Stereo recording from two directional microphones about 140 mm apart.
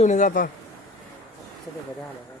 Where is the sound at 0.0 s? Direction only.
60° left (ahead or behind); by 0.5 s 80° left.